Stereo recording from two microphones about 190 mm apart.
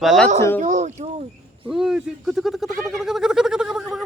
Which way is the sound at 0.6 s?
40° right (ahead or behind).